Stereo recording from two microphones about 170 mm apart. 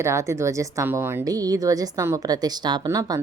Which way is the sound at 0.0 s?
15° right (ahead or behind).